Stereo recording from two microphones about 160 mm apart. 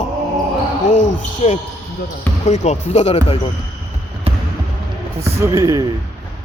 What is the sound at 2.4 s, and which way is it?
Speech, 45° left (ahead or behind).